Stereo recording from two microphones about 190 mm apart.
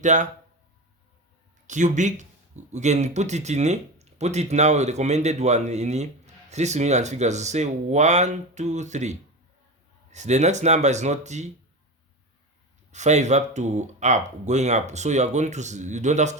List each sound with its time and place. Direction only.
0.0 s speech: 40° right (ahead or behind)
1.6 s speech: 40° right (ahead or behind)
12.9 s speech: 40° right (ahead or behind)